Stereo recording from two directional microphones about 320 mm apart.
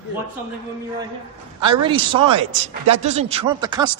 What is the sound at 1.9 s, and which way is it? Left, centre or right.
Speech, centre.